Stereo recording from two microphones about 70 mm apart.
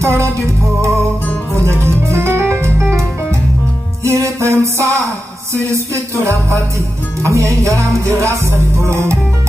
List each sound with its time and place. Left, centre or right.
1.6 s music: right
4.0 s music: right